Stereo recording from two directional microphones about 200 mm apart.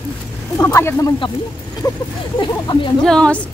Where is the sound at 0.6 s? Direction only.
15° left (ahead or behind).